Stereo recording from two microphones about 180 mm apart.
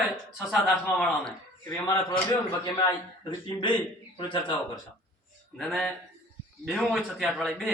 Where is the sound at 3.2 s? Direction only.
25° left (ahead or behind).